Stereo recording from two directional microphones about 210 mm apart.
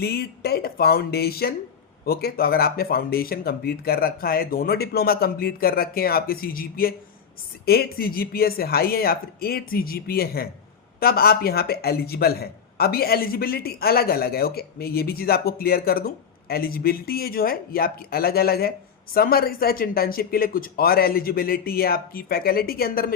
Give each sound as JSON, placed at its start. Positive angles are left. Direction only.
{"t": 0.0, "sound": "a man's voice", "side_deg": 50}